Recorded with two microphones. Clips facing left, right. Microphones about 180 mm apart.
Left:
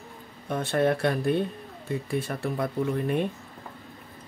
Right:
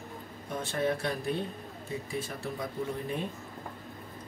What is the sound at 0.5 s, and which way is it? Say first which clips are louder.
Speech: left 6 dB; 65° left (ahead or behind).